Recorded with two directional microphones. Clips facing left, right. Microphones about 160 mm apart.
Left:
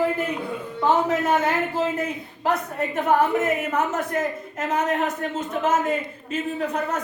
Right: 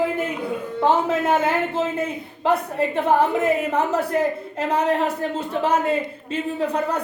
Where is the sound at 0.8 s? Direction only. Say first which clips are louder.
Right 1 dB; 30° right (ahead or behind).